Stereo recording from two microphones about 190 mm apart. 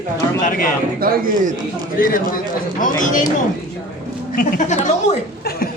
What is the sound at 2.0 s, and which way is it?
A man's voice, 45° left (ahead or behind).